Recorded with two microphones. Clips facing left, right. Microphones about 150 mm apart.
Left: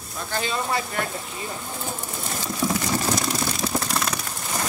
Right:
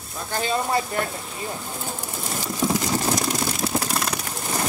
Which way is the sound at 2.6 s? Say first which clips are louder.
Right 2 dB; 15° right (ahead or behind).